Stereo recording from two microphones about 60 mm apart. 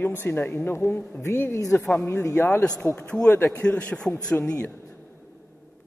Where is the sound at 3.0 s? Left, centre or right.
Centre.